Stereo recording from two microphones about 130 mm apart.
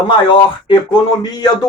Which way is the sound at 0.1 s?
40° left (ahead or behind).